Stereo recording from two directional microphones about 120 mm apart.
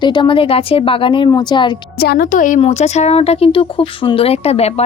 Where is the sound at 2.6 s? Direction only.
65° left (ahead or behind).